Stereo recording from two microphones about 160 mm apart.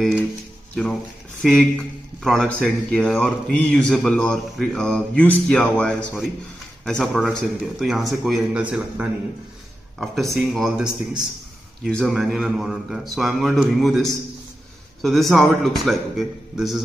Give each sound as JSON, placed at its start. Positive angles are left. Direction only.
{"t": 1.4, "sound": "a man's voice", "side_deg": 5}